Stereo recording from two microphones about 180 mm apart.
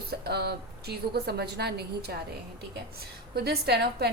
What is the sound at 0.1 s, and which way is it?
A woman's voice, 60° right (ahead or behind).